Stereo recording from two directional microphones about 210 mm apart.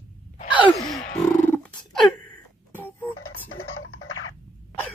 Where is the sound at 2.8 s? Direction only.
10° left (ahead or behind).